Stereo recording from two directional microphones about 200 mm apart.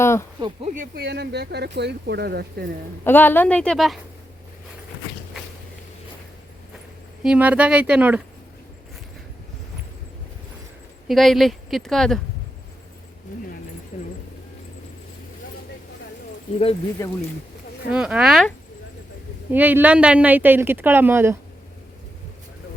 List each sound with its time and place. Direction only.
0.0 s speech: 15° left (ahead or behind)
0.6 s speech: 40° right (ahead or behind)
1.0 s speech: 55° right (ahead or behind)
3.0 s speech: 10° left (ahead or behind)
7.2 s a woman's voice: 5° right (ahead or behind)
11.1 s speech: centre (ahead or behind)
13.9 s a sound: 35° left (ahead or behind)
17.0 s speech: 15° left (ahead or behind)
17.9 s a woman's voice: 5° right (ahead or behind)